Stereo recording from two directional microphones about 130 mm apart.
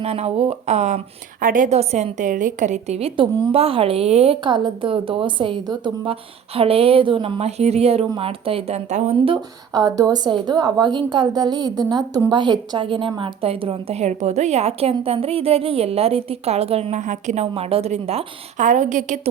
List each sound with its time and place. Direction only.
0.0 s speech: 50° right (ahead or behind); by 1.8 s 85° right
1.8 s speech: 55° right (ahead or behind)
3.2 s a woman's voice: 45° right (ahead or behind); by 9.1 s 60° right (ahead or behind)
9.7 s a woman's voice: 30° right (ahead or behind); by 19.3 s 70° right (ahead or behind)